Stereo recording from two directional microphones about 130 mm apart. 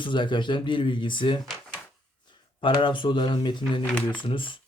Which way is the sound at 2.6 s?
40° left (ahead or behind).